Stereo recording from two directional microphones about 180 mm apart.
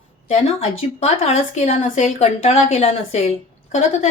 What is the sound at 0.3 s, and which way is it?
A woman's voice, 35° left (ahead or behind).